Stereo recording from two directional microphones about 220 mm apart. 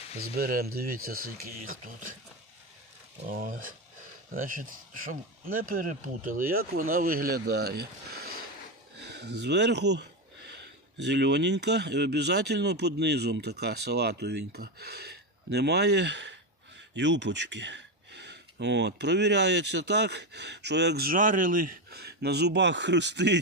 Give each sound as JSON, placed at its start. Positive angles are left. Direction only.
{"t": 0.3, "sound": "speech", "side_deg": -40}
{"t": 3.2, "sound": "speech", "side_deg": -40}